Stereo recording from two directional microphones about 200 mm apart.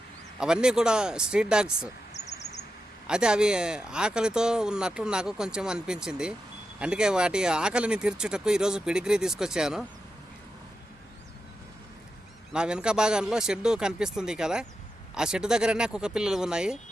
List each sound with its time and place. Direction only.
0.3 s speech: 5° right (ahead or behind)
2.1 s bird: 35° left (ahead or behind)
3.1 s speech: 5° right (ahead or behind)
12.5 s speech: 5° right (ahead or behind)